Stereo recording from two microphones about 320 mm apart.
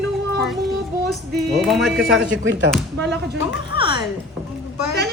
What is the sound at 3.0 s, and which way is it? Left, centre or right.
Speech, right.